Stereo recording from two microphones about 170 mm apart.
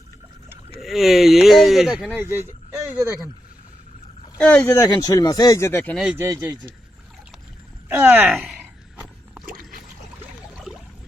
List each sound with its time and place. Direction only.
0.8 s speech: centre (ahead or behind)
2.1 s speech: 15° right (ahead or behind)
4.4 s speech: 5° left (ahead or behind)
4.6 s speech: 15° left (ahead or behind)
6.1 s speech: 15° right (ahead or behind)
7.9 s speech: 10° right (ahead or behind)
10.6 s a sound: centre (ahead or behind)